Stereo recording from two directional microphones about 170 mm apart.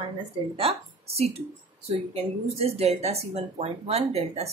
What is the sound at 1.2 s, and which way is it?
Speech, 35° right (ahead or behind).